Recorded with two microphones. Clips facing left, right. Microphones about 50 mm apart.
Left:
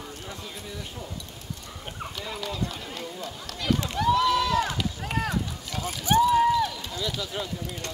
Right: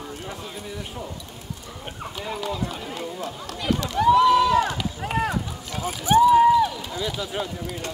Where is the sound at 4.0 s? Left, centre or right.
Centre.